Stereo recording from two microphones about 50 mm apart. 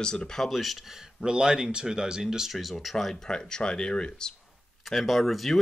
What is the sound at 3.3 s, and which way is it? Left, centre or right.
Speech, centre.